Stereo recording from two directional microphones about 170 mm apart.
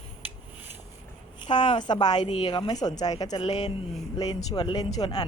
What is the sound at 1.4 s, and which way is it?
A woman's voice, 30° left (ahead or behind).